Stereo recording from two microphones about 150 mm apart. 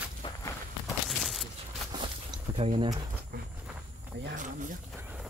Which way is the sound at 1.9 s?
35° right (ahead or behind).